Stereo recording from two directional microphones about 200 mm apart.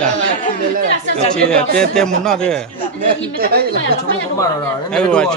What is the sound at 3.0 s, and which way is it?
Speech, 45° right (ahead or behind).